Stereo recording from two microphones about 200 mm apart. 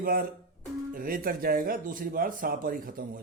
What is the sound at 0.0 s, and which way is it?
Speech, 45° right (ahead or behind).